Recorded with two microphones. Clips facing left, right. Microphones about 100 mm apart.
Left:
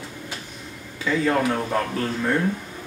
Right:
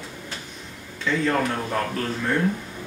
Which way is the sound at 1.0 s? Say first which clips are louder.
Left 1 dB; 5° left (ahead or behind).